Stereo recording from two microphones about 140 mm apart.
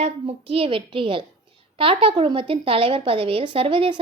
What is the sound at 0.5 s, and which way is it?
Speech, 40° right (ahead or behind).